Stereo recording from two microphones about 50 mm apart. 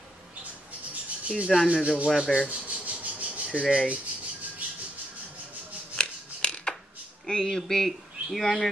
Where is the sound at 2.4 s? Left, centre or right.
Right.